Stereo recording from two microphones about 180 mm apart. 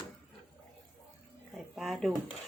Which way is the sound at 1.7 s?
Centre (ahead or behind).